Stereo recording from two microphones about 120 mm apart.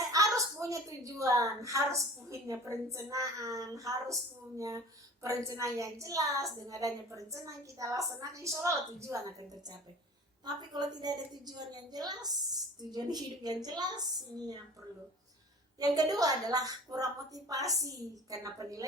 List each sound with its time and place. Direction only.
0.0 s a sound: 30° right (ahead or behind)
1.6 s a woman's voice: 25° right (ahead or behind)
10.4 s a woman's voice: 35° right (ahead or behind)
15.8 s a woman's voice: 30° right (ahead or behind)